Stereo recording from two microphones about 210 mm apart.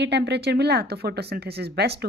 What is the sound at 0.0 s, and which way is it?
Speech, 55° right (ahead or behind).